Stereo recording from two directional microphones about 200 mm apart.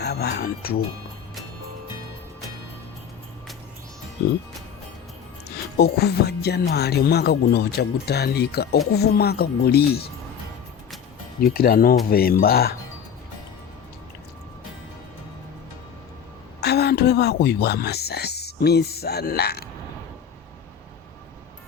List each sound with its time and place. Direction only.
0.0 s music: 55° left (ahead or behind)
5.5 s speech: 55° left (ahead or behind)
11.5 s speech: 50° left (ahead or behind)
16.6 s speech: 55° left (ahead or behind)